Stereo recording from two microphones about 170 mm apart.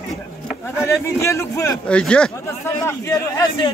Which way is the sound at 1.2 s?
15° left (ahead or behind).